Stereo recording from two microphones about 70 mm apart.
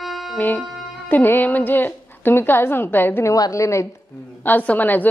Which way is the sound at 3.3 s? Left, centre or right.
Left.